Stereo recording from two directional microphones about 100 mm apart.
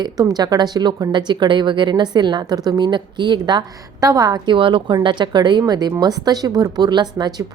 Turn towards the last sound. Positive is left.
turn(degrees=-45)  # may be behind; listen again after turning